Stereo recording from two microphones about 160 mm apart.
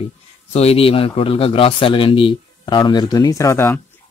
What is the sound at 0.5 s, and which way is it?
A man's voice, 40° left (ahead or behind).